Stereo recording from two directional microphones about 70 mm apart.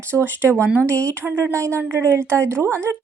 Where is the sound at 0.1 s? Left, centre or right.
Right.